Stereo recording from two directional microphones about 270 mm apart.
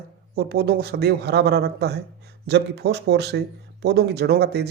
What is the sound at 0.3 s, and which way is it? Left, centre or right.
Speech, right.